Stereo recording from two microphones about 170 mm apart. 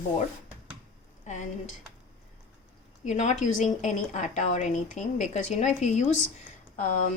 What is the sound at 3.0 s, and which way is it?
A woman's voice, 45° left (ahead or behind).